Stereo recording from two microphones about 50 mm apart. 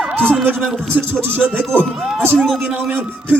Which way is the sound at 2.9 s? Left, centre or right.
Right.